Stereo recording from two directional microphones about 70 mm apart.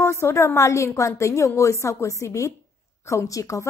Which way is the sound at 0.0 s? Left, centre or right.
Left.